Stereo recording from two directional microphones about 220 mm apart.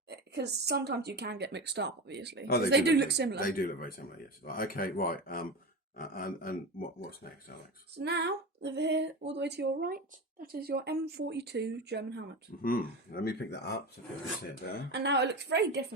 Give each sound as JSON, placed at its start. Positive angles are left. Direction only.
{"t": 0.1, "sound": "speech", "side_deg": -50}
{"t": 3.4, "sound": "speech", "side_deg": 40}
{"t": 7.9, "sound": "speech", "side_deg": -50}
{"t": 12.6, "sound": "speech", "side_deg": 40}
{"t": 14.9, "sound": "speech", "side_deg": -50}